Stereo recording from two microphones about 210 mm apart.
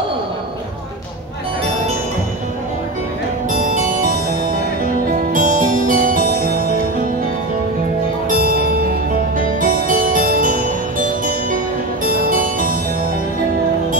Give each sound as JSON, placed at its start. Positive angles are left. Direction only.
{"t": 3.5, "sound": "music", "side_deg": -40}
{"t": 5.3, "sound": "music", "side_deg": -40}
{"t": 8.3, "sound": "music", "side_deg": -45}